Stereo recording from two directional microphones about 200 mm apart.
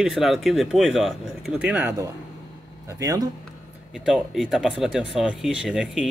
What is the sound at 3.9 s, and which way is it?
Speech, centre (ahead or behind).